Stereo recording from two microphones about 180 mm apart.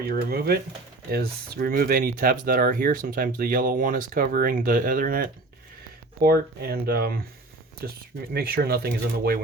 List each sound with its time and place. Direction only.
0.0 s speech: 60° right (ahead or behind)